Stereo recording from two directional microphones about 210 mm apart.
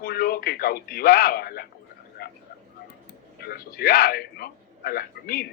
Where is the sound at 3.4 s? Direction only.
45° left (ahead or behind).